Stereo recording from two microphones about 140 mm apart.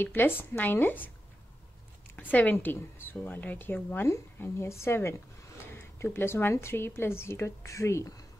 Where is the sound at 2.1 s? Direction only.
10° left (ahead or behind).